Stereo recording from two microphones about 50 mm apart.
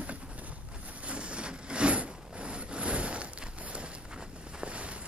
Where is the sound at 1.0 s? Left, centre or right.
Right.